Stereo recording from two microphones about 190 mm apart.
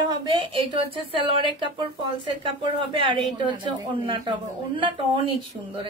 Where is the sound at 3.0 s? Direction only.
25° right (ahead or behind).